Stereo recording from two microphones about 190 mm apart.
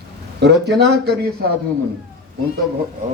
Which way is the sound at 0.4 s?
60° right (ahead or behind).